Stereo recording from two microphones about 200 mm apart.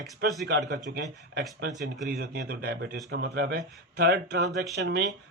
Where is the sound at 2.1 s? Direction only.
50° right (ahead or behind).